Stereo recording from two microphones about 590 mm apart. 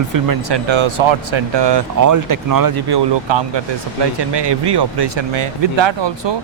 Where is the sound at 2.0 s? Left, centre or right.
Right.